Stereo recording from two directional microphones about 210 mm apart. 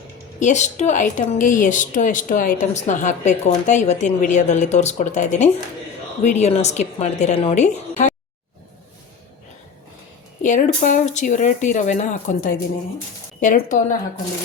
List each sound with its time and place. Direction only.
0.3 s a woman's voice: 35° left (ahead or behind)
10.4 s a woman's voice: 35° left (ahead or behind)